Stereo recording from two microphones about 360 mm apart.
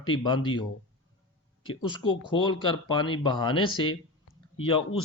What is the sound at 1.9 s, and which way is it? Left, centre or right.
Speech, centre.